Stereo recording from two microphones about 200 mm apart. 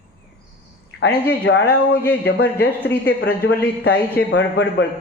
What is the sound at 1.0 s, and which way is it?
Speech, 55° left (ahead or behind).